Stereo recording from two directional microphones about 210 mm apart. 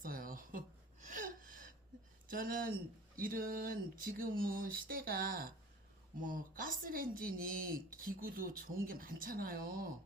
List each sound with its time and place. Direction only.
0.0 s a sound: 40° right (ahead or behind)
1.0 s gasp: 40° right (ahead or behind)
2.2 s speech: 40° right (ahead or behind)